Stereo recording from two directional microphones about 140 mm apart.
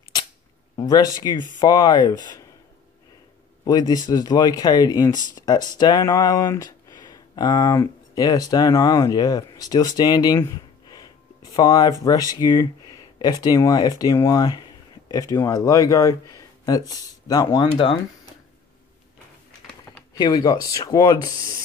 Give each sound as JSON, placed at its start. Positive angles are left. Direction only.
{"t": 0.7, "sound": "speech", "side_deg": 30}
{"t": 3.6, "sound": "speech", "side_deg": 30}
{"t": 20.2, "sound": "speech", "side_deg": 30}